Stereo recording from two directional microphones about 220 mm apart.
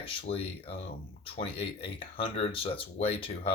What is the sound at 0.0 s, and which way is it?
Speech, 25° left (ahead or behind).